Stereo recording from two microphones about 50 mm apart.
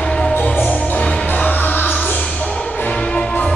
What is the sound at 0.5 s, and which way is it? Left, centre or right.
Music, left.